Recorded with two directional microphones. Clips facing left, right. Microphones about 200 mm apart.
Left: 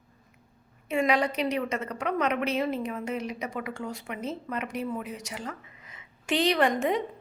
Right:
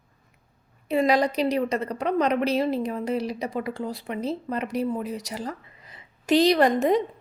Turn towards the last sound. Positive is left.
turn(degrees=-35)  # may be behind; listen again after turning